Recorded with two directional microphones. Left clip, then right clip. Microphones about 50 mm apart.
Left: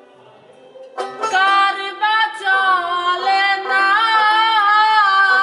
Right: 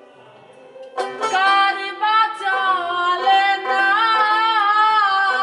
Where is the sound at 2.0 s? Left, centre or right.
Left.